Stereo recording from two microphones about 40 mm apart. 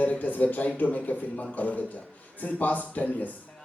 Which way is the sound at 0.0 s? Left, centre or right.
Left.